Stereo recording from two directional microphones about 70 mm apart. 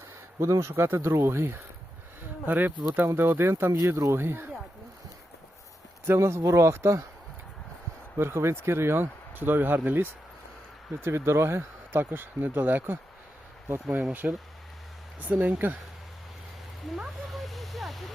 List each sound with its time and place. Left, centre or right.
0.3 s speech: right
6.1 s speech: right
8.2 s speech: right
11.0 s speech: right
14.1 s speech: right
16.8 s speech: centre